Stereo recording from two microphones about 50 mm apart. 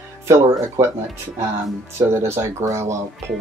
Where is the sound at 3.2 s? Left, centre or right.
Right.